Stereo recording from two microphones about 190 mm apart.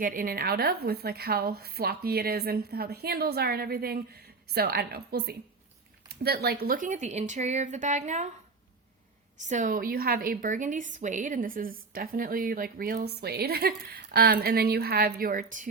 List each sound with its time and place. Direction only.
0.0 s a woman's voice: 45° right (ahead or behind)
9.5 s a woman's voice: 45° right (ahead or behind)